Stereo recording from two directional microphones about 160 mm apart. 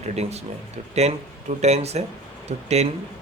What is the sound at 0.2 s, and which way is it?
Speech, 40° right (ahead or behind).